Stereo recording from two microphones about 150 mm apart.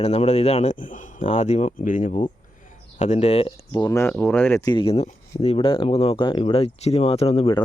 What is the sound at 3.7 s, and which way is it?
Speech, 30° left (ahead or behind).